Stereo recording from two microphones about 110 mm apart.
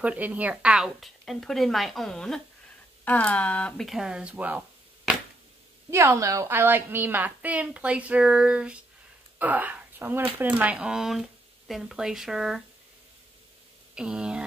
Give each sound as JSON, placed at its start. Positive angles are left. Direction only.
{"t": 0.0, "sound": "speech", "side_deg": -15}
{"t": 3.8, "sound": "a woman's voice", "side_deg": -5}
{"t": 5.9, "sound": "a woman's voice", "side_deg": -25}
{"t": 13.9, "sound": "a woman's voice", "side_deg": -5}